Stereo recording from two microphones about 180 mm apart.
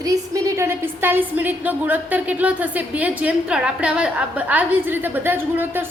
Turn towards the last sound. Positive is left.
turn(degrees=-10)  # may be behind; listen again after turning